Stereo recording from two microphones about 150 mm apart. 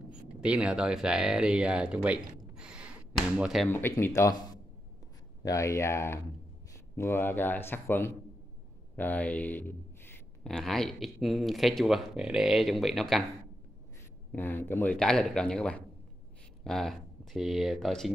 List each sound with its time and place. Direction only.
0.1 s speech: 5° right (ahead or behind)
3.6 s speech: 15° left (ahead or behind)
5.4 s speech: 20° left (ahead or behind)
10.4 s speech: 5° left (ahead or behind)
14.3 s speech: 15° left (ahead or behind)